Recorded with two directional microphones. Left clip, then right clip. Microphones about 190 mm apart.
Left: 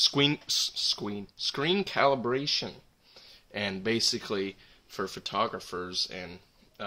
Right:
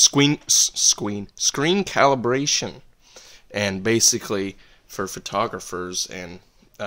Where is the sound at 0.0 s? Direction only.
50° right (ahead or behind).